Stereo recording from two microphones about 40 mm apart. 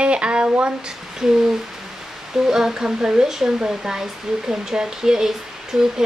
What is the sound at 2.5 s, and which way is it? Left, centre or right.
Speech, centre.